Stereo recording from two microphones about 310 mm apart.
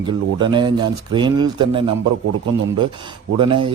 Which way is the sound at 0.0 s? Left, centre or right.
Centre.